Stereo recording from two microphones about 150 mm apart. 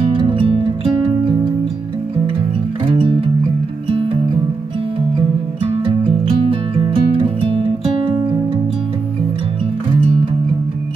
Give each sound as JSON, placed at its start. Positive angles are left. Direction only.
{"t": 0.0, "sound": "music", "side_deg": -35}
{"t": 5.6, "sound": "music", "side_deg": -35}